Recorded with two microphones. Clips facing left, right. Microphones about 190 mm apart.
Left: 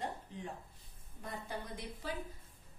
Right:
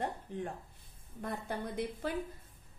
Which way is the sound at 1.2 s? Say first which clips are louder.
Right 5 dB; 55° right (ahead or behind).